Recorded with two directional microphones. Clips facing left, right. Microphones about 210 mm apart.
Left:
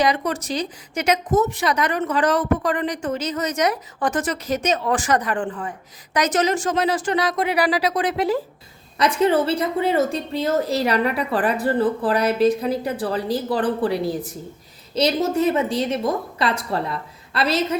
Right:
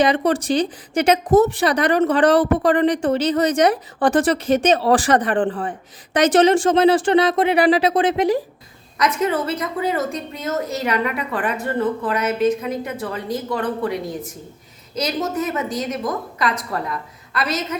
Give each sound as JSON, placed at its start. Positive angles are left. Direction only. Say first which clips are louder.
{"t": 0.0, "sound": "speech", "louder": "right 4 dB", "side_deg": -30}
{"t": 9.0, "sound": "a woman's voice", "louder": "left 2 dB", "side_deg": 30}